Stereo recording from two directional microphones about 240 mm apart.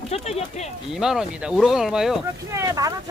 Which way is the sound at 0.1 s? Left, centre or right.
Left.